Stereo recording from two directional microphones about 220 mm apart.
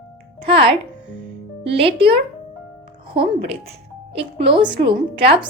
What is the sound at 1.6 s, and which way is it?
Speech, 25° right (ahead or behind).